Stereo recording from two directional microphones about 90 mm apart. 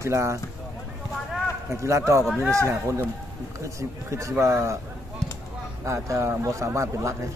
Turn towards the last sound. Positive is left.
turn(degrees=-35)  # may be behind; listen again after turning